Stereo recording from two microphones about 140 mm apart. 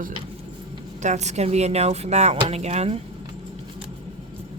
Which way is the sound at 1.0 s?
55° right (ahead or behind).